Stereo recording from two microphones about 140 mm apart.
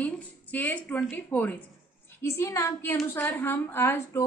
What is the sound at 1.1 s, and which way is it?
A woman's voice, 15° left (ahead or behind).